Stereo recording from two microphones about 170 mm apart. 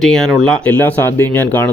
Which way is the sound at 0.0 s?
Centre (ahead or behind).